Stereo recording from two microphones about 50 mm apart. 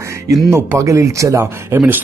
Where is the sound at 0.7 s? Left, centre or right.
Right.